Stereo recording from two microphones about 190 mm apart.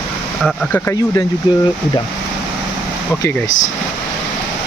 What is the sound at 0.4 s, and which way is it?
Speech, 10° left (ahead or behind).